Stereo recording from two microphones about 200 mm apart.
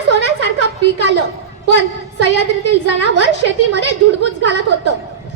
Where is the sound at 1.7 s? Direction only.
60° left (ahead or behind).